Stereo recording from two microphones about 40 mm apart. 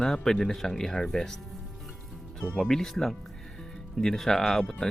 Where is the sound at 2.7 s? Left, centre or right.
Centre.